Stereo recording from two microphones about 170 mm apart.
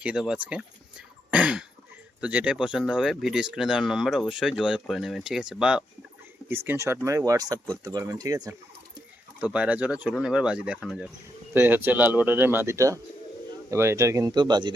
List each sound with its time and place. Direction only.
0.0 s speech: 5° right (ahead or behind); by 8.5 s 20° right (ahead or behind)
9.4 s speech: 5° right (ahead or behind)
11.5 s speech: 10° right (ahead or behind)